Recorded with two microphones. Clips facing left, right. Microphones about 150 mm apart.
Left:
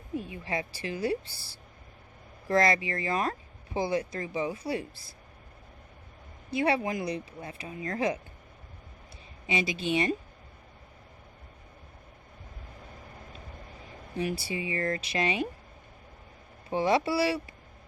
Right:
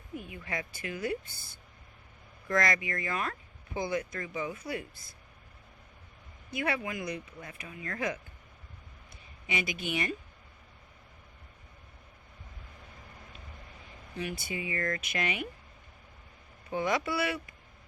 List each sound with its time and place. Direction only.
0.1 s speech: 30° left (ahead or behind)
6.5 s speech: 30° left (ahead or behind)
9.5 s speech: 25° left (ahead or behind)
14.2 s speech: 30° left (ahead or behind)
16.6 s speech: 30° left (ahead or behind)